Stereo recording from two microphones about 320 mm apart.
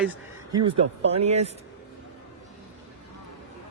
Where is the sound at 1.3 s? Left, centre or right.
Centre.